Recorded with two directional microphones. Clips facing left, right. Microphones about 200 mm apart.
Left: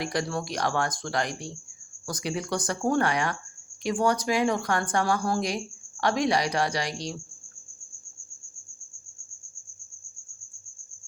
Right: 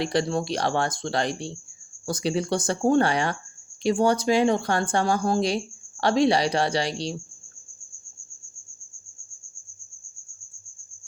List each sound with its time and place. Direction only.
0.0 s speech: 30° right (ahead or behind)